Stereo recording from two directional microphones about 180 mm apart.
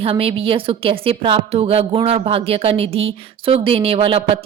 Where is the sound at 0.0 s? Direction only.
30° right (ahead or behind).